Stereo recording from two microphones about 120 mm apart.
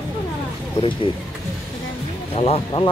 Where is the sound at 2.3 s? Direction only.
55° left (ahead or behind).